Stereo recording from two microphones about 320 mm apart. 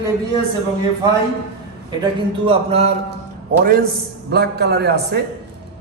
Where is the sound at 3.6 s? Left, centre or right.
Right.